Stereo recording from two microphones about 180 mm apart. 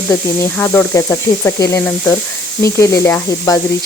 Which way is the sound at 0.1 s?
15° left (ahead or behind).